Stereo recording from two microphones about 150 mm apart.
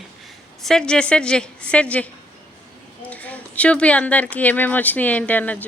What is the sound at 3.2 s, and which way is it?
Speech, 10° left (ahead or behind).